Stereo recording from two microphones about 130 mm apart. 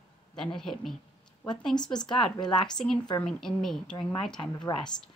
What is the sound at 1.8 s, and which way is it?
Speech, 35° left (ahead or behind).